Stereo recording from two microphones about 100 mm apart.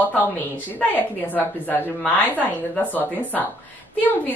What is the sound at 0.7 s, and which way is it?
A woman's voice, 15° left (ahead or behind).